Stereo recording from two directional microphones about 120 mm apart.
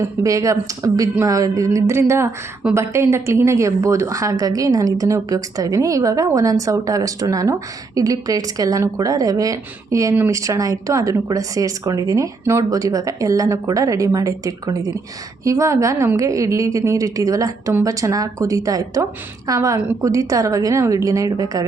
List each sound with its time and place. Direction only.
0.0 s a woman's voice: 30° right (ahead or behind)